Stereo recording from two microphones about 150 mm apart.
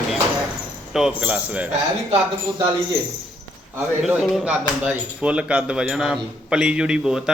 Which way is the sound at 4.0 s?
5° right (ahead or behind).